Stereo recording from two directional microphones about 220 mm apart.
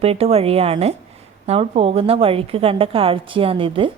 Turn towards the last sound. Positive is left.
turn(degrees=-25)  # may be behind; listen again after turning